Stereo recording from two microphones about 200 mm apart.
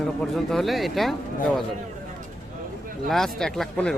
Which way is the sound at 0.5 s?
Centre (ahead or behind).